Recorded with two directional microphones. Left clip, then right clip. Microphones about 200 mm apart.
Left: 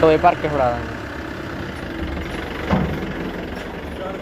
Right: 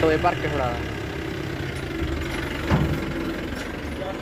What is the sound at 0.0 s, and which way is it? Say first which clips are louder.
Speech: left 7 dB; 15° left (ahead or behind).